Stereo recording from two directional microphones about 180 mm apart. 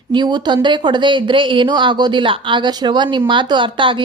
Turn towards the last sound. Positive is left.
turn(degrees=-25)  # may be behind; listen again after turning